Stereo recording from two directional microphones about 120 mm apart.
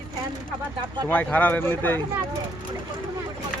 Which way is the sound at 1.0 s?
10° left (ahead or behind).